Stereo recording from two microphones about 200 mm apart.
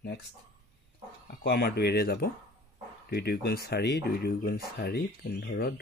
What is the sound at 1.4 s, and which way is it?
Speech, 50° left (ahead or behind).